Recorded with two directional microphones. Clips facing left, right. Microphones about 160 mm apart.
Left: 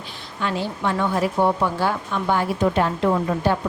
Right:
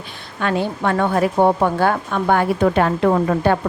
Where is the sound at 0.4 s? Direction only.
55° right (ahead or behind).